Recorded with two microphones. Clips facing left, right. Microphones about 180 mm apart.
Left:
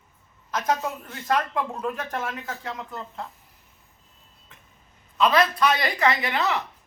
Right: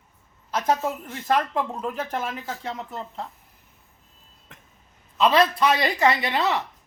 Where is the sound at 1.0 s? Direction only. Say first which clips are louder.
Right 2 dB; 25° right (ahead or behind).